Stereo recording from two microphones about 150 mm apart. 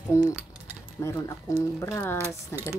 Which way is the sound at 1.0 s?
20° left (ahead or behind).